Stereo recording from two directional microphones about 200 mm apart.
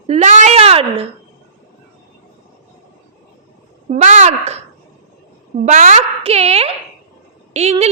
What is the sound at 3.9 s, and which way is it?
Speech, 35° right (ahead or behind).